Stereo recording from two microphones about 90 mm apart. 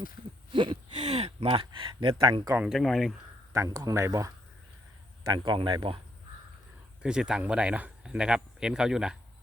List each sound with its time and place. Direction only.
0.5 s speech: 65° right (ahead or behind)
2.6 s speech: 5° left (ahead or behind)
3.5 s speech: 40° right (ahead or behind)
5.3 s speech: 60° right (ahead or behind)
7.0 s speech: 10° right (ahead or behind)